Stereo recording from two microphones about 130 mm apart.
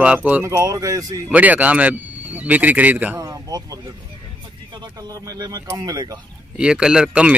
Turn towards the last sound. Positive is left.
turn(degrees=-10)  # may be behind; listen again after turning